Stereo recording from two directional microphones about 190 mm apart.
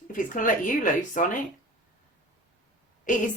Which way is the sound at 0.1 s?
45° left (ahead or behind).